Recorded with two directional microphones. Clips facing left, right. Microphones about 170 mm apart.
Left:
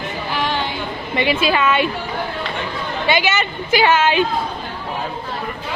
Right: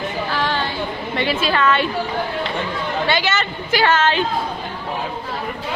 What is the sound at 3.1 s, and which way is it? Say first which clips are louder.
Speech: left 5 dB; 15° left (ahead or behind).